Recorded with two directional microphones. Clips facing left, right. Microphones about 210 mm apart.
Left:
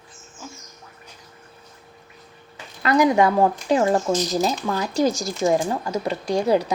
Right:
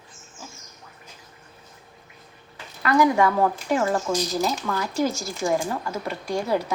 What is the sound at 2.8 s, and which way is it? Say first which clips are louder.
Speech: left 2 dB; 20° left (ahead or behind).